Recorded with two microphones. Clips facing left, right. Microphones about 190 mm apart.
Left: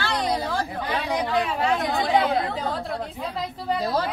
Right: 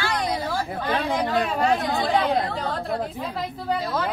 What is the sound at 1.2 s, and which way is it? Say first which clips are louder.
Speech: right 1 dB; 45° right (ahead or behind).